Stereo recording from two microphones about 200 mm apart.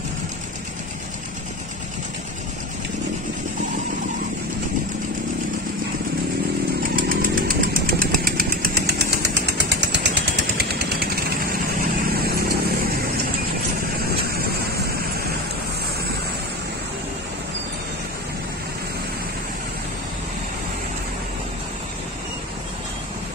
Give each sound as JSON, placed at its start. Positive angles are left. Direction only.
{"t": 7.0, "sound": "chainsaw", "side_deg": -45}
{"t": 10.6, "sound": "a sound", "side_deg": -50}
{"t": 12.1, "sound": "vehicle", "side_deg": -50}